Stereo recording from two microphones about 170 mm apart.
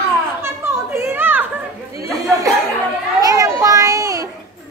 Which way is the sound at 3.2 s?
20° right (ahead or behind).